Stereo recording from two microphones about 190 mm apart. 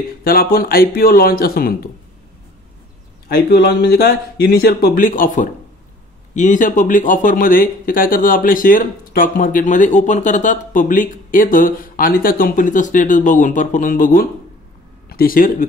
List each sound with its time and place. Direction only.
0.2 s speech: 50° left (ahead or behind)
3.3 s speech: 55° left (ahead or behind)